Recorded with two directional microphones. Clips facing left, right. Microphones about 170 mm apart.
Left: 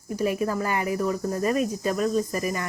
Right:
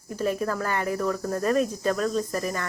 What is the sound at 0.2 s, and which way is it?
Speech, 10° left (ahead or behind).